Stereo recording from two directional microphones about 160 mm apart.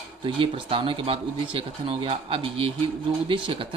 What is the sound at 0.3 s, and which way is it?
Speech, 35° right (ahead or behind).